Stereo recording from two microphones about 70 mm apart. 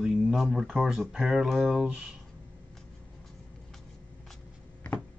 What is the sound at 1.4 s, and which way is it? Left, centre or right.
Speech, centre.